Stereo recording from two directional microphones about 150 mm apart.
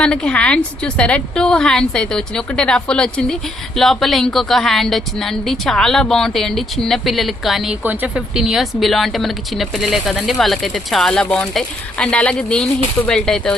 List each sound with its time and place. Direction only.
0.0 s speech: 5° left (ahead or behind)